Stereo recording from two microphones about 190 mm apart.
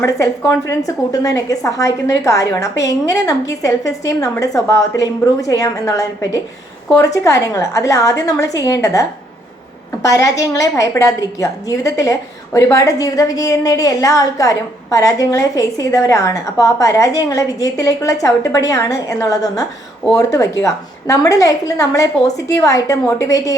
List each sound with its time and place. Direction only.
0.7 s a woman's voice: 20° left (ahead or behind)